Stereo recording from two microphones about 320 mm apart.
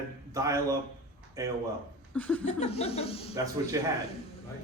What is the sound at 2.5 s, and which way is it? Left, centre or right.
Speech, centre.